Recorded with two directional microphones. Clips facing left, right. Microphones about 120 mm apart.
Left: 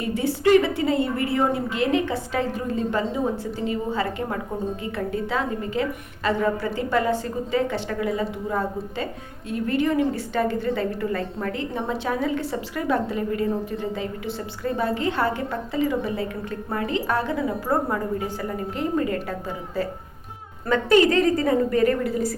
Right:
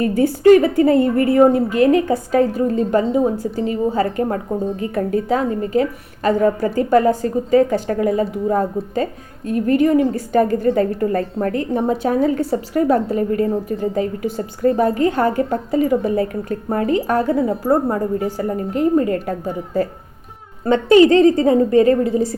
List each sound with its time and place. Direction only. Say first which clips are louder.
0.0 s a woman's voice: right 8 dB; 45° right (ahead or behind)
20.7 s a woman's voice: right 7 dB; 25° right (ahead or behind)